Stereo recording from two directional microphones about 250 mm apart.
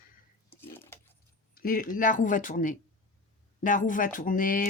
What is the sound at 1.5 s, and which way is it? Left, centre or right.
Speech, left.